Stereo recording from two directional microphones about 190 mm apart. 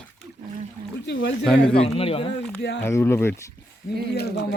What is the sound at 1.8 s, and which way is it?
Speech, 30° left (ahead or behind).